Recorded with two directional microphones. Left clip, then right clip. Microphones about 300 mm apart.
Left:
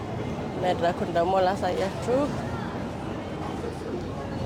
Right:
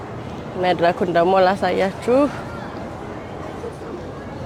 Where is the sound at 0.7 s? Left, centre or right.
Right.